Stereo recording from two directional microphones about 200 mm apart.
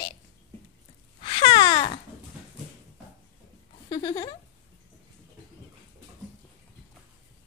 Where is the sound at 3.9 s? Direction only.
20° left (ahead or behind).